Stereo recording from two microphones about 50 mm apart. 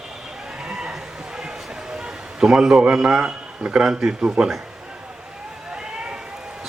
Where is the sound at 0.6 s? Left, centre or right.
Centre.